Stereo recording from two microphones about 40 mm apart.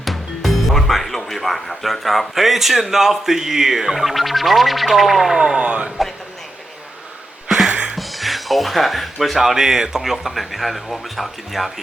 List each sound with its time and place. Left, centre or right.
0.0 s speech: centre
5.5 s speech: right
7.4 s music: centre
7.7 s music: right
7.9 s speech: centre